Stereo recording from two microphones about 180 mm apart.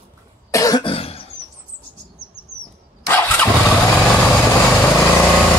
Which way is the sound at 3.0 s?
10° left (ahead or behind).